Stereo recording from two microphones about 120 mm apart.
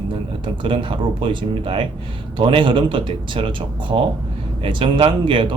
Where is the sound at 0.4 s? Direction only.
45° right (ahead or behind).